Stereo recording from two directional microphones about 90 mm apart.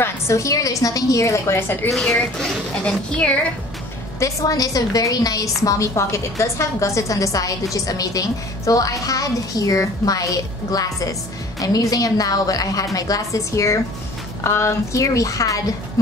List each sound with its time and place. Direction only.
0.0 s a woman's voice: 35° left (ahead or behind)
2.8 s a woman's voice: 15° left (ahead or behind)
4.2 s a woman's voice: 40° left (ahead or behind)